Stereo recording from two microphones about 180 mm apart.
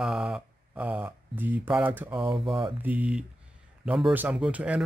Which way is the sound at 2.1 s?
30° right (ahead or behind).